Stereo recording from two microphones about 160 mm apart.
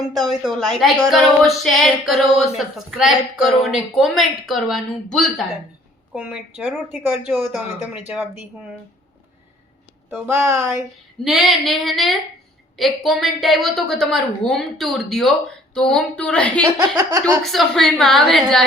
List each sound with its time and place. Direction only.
0.0 s a woman's voice: centre (ahead or behind)
10.1 s speech: 15° right (ahead or behind)
11.2 s a woman's voice: centre (ahead or behind)
17.0 s speech: 20° right (ahead or behind)
17.4 s a woman's voice: centre (ahead or behind)